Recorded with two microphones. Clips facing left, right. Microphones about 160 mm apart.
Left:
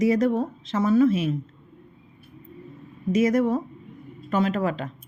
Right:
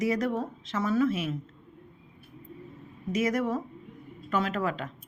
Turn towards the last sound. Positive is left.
turn(degrees=25)  # may be behind; listen again after turning